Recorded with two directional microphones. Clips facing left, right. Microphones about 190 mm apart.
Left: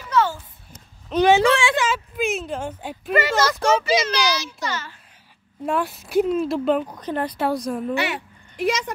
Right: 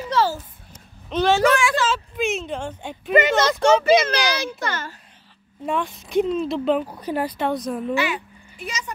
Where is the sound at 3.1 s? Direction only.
20° right (ahead or behind).